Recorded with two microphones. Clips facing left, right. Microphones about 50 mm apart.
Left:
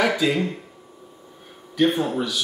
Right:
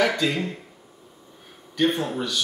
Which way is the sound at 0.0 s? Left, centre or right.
Centre.